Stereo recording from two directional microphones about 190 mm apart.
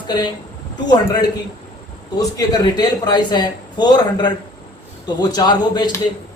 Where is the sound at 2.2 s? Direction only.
20° left (ahead or behind).